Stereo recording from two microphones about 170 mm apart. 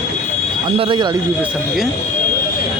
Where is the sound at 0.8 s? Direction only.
30° right (ahead or behind).